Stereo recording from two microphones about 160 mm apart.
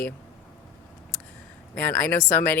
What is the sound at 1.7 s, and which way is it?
Speech, 10° left (ahead or behind).